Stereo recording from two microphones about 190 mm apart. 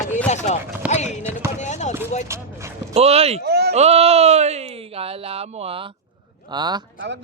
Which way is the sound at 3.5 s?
60° right (ahead or behind).